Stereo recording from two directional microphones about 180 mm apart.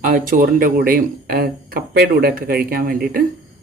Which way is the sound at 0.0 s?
45° right (ahead or behind).